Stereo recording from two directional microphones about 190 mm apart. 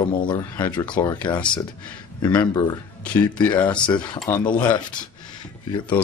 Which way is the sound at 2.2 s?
25° left (ahead or behind).